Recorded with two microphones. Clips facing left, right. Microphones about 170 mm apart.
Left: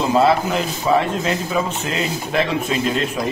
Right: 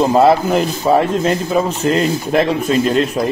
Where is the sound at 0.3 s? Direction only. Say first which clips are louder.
Right 5 dB; 45° right (ahead or behind).